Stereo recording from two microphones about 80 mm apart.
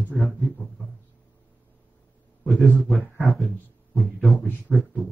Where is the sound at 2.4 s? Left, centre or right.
Centre.